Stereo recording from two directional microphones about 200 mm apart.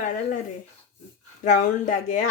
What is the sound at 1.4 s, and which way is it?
Speech, 40° left (ahead or behind).